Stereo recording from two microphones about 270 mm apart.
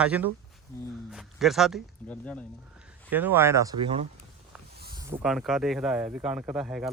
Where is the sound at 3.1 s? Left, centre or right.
Centre.